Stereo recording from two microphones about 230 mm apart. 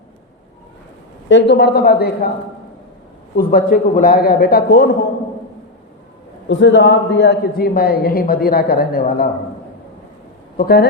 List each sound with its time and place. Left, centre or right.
1.3 s a man's voice: left
3.3 s a man's voice: left
6.5 s a man's voice: left
10.6 s a man's voice: left